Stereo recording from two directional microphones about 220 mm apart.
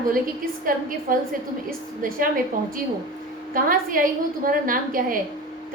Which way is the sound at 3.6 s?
40° right (ahead or behind).